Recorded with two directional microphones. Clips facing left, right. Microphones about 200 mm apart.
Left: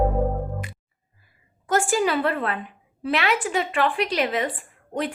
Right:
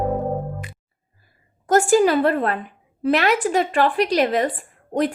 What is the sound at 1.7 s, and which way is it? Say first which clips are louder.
A woman's voice: right 6 dB; 40° right (ahead or behind).